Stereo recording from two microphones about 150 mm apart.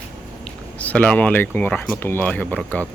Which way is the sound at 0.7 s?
10° left (ahead or behind).